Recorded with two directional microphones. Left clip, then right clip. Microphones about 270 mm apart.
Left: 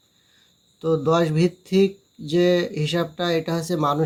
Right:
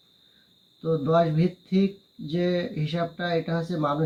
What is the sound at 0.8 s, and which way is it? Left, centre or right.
Speech, left.